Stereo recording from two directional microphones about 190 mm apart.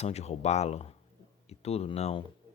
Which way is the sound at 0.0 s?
35° left (ahead or behind).